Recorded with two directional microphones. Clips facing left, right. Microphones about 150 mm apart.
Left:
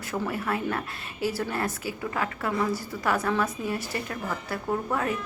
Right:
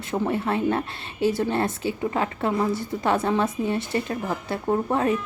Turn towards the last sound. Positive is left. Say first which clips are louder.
# right 5 dB
turn(degrees=-25)  # may be behind; listen again after turning